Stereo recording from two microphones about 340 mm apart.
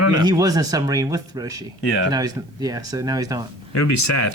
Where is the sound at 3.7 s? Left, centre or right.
Left.